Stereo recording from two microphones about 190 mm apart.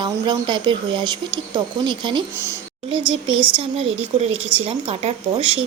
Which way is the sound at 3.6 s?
30° right (ahead or behind).